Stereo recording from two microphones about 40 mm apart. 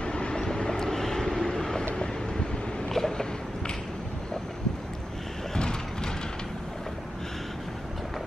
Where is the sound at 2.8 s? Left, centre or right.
Centre.